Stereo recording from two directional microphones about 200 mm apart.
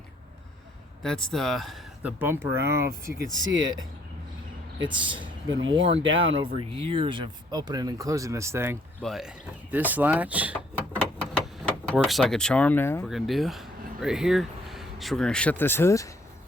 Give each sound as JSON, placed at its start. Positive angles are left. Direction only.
{"t": 1.0, "sound": "speech", "side_deg": 5}
{"t": 4.9, "sound": "speech", "side_deg": -25}
{"t": 6.0, "sound": "speech", "side_deg": -75}
{"t": 6.3, "sound": "speech", "side_deg": -25}
{"t": 9.0, "sound": "speech", "side_deg": 0}
{"t": 10.9, "sound": "door", "side_deg": 5}
{"t": 13.1, "sound": "speech", "side_deg": 0}